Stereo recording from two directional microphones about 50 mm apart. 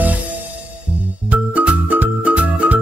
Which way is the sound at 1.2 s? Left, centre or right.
Right.